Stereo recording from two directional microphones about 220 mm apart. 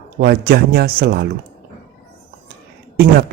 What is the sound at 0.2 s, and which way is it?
Speech, 45° right (ahead or behind).